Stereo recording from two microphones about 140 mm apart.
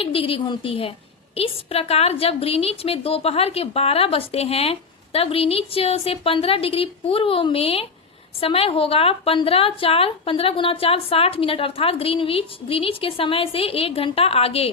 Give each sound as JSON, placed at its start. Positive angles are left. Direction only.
{"t": 0.0, "sound": "a woman's voice", "side_deg": 40}